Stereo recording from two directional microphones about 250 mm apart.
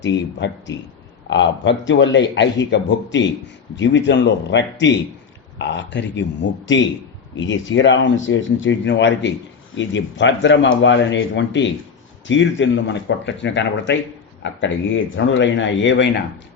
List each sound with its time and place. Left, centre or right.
0.0 s a man's voice: left